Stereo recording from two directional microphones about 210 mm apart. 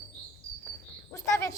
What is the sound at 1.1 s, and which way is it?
Cricket, 15° left (ahead or behind).